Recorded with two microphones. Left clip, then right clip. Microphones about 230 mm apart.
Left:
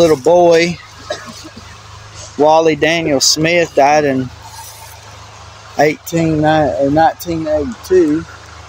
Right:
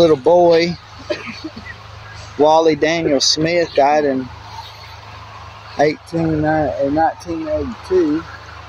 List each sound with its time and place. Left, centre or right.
0.0 s speech: centre
2.4 s speech: centre
5.8 s speech: left
6.1 s speech: left
6.4 s speech: left